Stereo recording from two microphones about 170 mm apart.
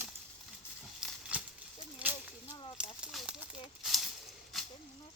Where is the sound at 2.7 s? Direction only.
5° right (ahead or behind).